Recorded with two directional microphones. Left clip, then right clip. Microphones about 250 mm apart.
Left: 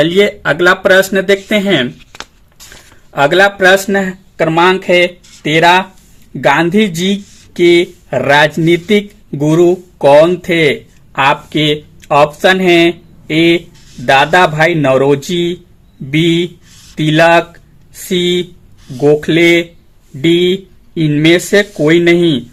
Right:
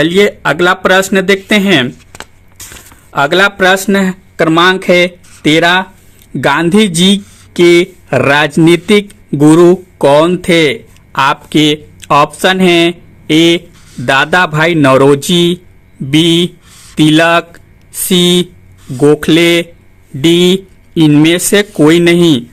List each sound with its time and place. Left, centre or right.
0.0 s speech: right
3.1 s speech: right
18.9 s speech: right
19.2 s speech: right